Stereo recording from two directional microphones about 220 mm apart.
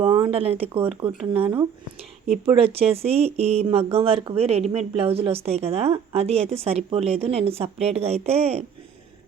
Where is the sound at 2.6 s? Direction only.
25° right (ahead or behind).